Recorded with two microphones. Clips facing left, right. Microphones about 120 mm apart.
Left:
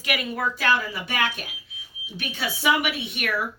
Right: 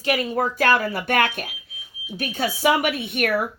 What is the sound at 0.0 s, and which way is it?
Speech, 35° right (ahead or behind).